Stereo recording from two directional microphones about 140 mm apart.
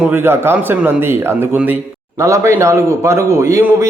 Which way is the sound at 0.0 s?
15° right (ahead or behind).